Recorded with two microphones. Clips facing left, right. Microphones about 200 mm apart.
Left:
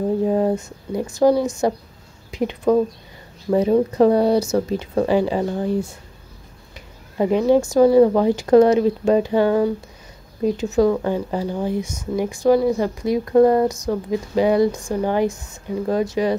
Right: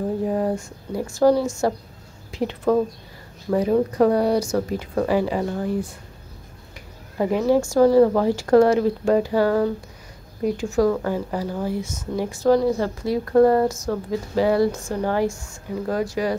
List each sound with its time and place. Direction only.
0.3 s a woman's voice: 20° left (ahead or behind)
7.2 s a woman's voice: 20° left (ahead or behind)